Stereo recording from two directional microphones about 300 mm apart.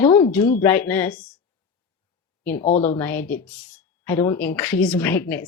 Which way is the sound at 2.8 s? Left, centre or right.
Centre.